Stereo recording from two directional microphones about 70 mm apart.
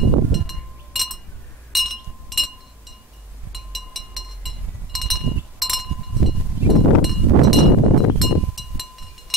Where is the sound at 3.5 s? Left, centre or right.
Centre.